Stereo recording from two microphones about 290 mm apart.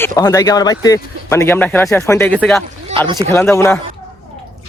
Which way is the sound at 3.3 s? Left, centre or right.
Centre.